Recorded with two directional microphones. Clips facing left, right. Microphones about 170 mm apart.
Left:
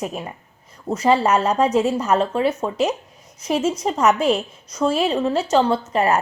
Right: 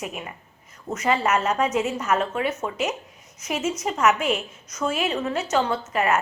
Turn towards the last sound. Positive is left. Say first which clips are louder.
# left 4 dB
turn(degrees=35)  # may be behind; listen again after turning